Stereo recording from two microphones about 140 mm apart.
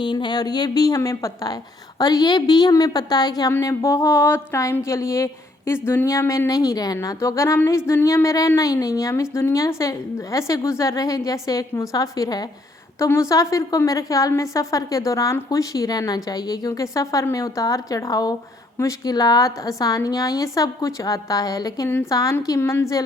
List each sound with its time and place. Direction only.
0.0 s a woman's voice: 35° left (ahead or behind)